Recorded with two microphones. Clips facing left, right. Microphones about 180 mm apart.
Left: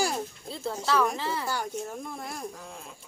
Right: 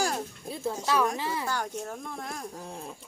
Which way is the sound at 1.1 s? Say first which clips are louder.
Even; 15° right (ahead or behind).